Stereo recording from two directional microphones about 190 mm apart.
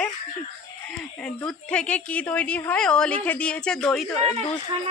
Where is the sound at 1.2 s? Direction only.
5° left (ahead or behind).